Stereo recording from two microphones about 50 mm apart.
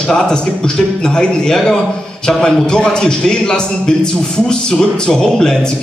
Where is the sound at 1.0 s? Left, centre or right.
Centre.